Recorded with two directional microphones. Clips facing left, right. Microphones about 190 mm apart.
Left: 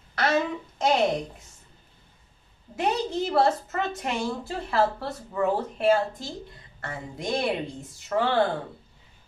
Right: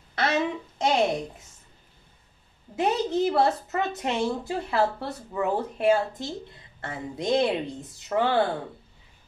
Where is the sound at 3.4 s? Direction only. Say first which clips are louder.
Even; 20° right (ahead or behind).